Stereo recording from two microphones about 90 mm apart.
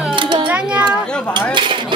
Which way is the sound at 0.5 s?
15° right (ahead or behind).